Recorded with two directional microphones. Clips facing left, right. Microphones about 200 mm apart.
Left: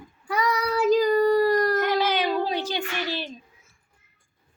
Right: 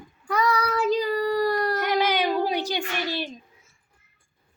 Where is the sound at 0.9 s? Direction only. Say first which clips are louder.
Left 7 dB; 45° left (ahead or behind).